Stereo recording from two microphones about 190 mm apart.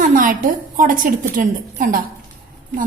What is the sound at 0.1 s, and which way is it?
A woman's voice, 45° right (ahead or behind).